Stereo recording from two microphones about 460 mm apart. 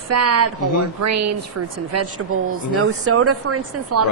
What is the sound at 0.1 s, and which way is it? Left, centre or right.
A woman's voice, right.